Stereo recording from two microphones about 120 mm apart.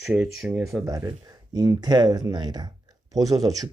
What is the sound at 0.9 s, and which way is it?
Speech, 30° right (ahead or behind).